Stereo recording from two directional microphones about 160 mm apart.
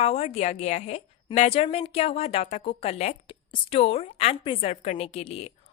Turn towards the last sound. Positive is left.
turn(degrees=40)  # may be behind; listen again after turning